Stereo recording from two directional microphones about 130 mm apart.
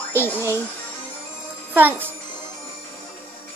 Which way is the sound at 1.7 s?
15° right (ahead or behind).